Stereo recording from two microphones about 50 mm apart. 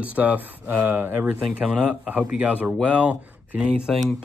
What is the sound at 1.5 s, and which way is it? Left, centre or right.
Speech, right.